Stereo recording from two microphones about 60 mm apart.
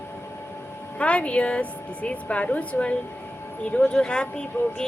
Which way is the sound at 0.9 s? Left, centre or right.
Left.